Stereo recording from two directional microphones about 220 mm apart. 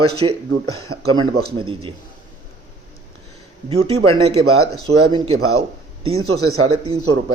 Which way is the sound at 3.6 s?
25° right (ahead or behind).